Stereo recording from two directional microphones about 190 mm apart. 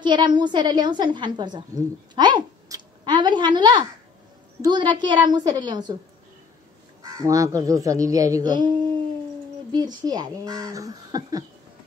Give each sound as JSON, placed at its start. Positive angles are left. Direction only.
{"t": 0.0, "sound": "a woman's voice", "side_deg": -25}
{"t": 7.0, "sound": "speech", "side_deg": -15}